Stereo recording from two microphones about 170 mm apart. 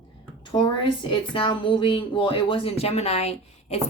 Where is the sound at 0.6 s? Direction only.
25° left (ahead or behind).